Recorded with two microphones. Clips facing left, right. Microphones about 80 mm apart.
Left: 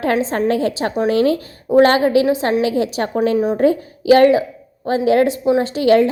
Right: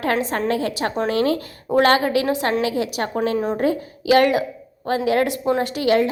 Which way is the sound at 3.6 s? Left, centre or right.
Left.